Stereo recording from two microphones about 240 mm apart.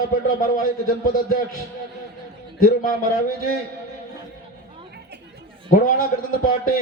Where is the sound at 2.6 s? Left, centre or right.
Left.